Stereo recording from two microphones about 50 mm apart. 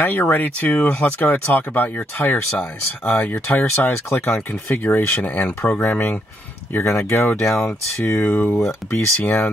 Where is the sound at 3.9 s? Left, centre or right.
Left.